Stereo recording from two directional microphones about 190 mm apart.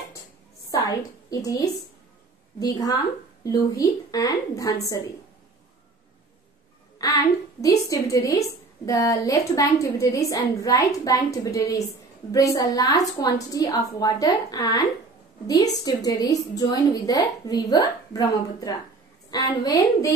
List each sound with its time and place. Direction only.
0.7 s a woman's voice: 20° left (ahead or behind)
7.0 s a woman's voice: 20° left (ahead or behind)